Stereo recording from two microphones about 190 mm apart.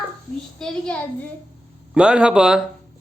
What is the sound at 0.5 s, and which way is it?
A child's voice, 5° left (ahead or behind).